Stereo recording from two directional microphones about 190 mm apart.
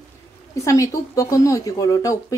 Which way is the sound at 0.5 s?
15° left (ahead or behind).